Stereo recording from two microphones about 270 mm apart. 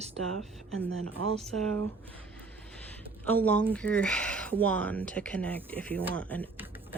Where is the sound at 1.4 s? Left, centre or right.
Centre.